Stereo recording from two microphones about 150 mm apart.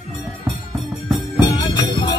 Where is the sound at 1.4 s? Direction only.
30° left (ahead or behind).